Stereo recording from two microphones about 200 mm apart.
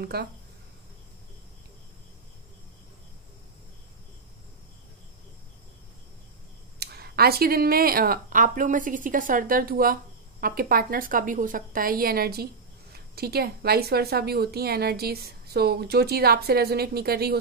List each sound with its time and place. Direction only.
0.0 s a woman's voice: 50° right (ahead or behind)
6.8 s a woman's voice: 50° right (ahead or behind)